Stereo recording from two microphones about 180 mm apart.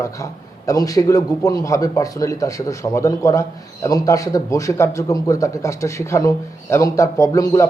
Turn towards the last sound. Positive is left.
turn(degrees=20)  # may be behind; listen again after turning